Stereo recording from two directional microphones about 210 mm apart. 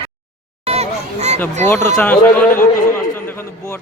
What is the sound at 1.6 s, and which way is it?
Speech, 10° left (ahead or behind).